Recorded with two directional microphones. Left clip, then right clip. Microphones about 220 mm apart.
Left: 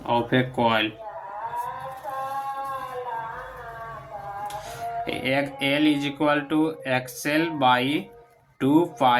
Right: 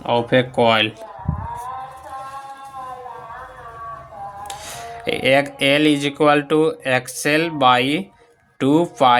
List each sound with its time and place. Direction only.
0.0 s speech: 40° right (ahead or behind)
4.4 s speech: 50° right (ahead or behind)